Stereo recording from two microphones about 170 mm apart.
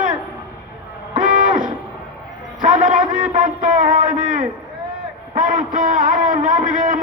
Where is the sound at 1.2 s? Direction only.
50° right (ahead or behind).